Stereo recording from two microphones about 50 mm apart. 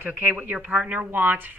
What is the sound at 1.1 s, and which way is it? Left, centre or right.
Speech, right.